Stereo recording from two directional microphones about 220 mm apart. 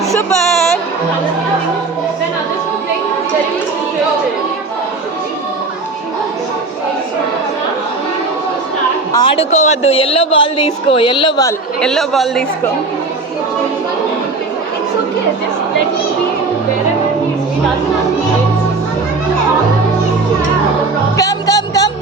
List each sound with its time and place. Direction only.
0.1 s a sound: 5° left (ahead or behind)
9.1 s a woman's voice: 25° left (ahead or behind)
11.8 s a man's voice: centre (ahead or behind)
21.2 s music: 15° left (ahead or behind)